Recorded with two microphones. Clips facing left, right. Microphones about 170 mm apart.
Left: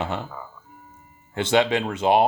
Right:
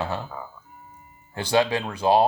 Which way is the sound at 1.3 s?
20° left (ahead or behind).